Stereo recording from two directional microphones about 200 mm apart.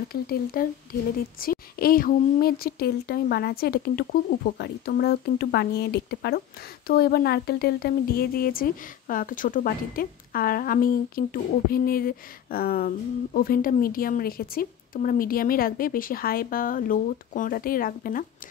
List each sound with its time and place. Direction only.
0.1 s speech: 50° left (ahead or behind)